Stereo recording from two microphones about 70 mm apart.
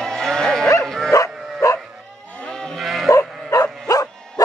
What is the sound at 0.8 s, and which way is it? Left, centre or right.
Bow-wow, centre.